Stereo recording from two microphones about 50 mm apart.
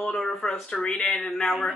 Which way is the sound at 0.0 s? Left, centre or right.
Centre.